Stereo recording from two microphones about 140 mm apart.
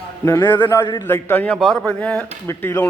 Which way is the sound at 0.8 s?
35° left (ahead or behind).